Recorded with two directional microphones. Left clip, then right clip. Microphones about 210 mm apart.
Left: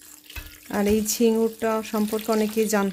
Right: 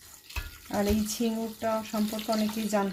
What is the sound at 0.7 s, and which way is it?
Speech, 50° left (ahead or behind).